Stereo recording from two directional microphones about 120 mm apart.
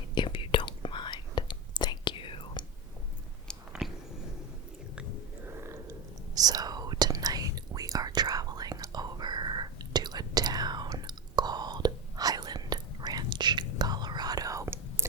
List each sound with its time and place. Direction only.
0.1 s whispering: 40° left (ahead or behind)
3.7 s a sound: centre (ahead or behind)
5.5 s whispering: 25° right (ahead or behind)